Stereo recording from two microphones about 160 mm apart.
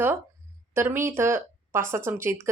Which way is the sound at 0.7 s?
15° right (ahead or behind).